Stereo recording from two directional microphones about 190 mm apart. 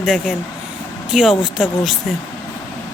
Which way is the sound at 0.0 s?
Centre (ahead or behind).